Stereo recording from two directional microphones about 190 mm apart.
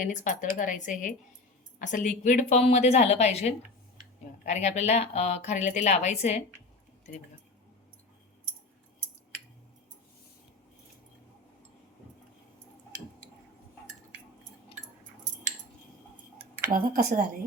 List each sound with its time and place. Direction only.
0.0 s a woman's voice: 40° left (ahead or behind)
16.7 s speech: 45° right (ahead or behind)